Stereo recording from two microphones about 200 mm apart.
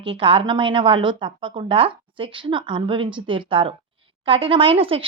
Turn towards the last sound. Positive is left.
turn(degrees=-25)  # may be behind; listen again after turning